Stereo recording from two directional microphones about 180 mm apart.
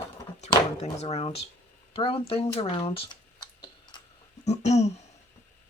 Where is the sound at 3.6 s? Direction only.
25° left (ahead or behind).